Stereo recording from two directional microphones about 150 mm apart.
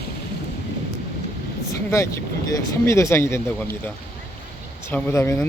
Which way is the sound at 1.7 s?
20° left (ahead or behind).